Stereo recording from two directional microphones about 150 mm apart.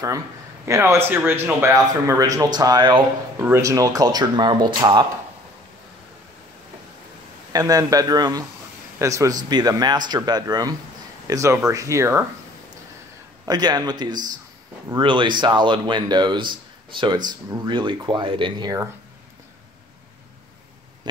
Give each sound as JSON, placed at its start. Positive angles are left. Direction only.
{"t": 0.7, "sound": "speech", "side_deg": -20}
{"t": 3.3, "sound": "speech", "side_deg": -15}
{"t": 7.5, "sound": "speech", "side_deg": -25}
{"t": 13.5, "sound": "speech", "side_deg": -25}